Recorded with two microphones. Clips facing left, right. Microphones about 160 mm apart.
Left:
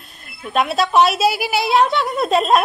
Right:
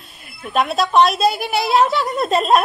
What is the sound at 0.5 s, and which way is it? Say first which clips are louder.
A woman's voice: even; centre (ahead or behind).